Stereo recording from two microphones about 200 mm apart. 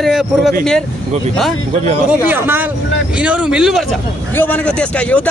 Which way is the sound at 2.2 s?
10° right (ahead or behind).